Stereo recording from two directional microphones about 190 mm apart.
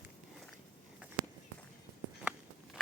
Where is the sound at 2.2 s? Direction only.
5° right (ahead or behind).